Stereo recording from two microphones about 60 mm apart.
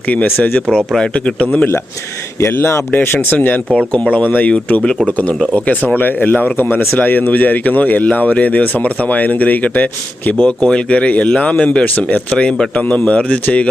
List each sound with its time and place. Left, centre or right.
0.1 s speech: left
0.9 s speech: centre
2.5 s speech: left
3.7 s speech: centre
10.7 s speech: centre